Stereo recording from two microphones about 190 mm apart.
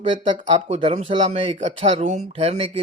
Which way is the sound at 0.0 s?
25° right (ahead or behind).